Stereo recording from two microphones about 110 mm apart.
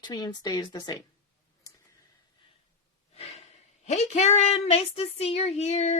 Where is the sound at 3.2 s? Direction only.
70° left (ahead or behind).